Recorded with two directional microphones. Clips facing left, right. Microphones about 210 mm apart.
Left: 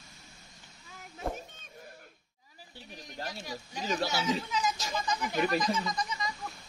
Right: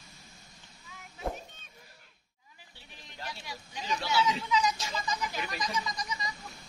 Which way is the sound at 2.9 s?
45° left (ahead or behind).